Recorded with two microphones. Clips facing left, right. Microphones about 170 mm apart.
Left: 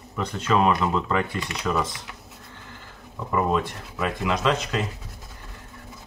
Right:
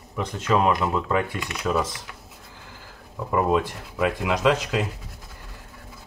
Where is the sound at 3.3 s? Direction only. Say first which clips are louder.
Right 2 dB; 5° right (ahead or behind).